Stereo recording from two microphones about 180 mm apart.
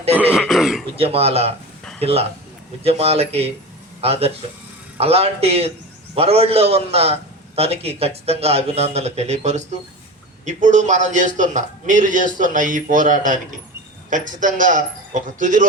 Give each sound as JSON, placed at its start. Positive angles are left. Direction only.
{"t": 0.3, "sound": "throat clearing", "side_deg": 0}
{"t": 0.9, "sound": "a man's voice", "side_deg": -30}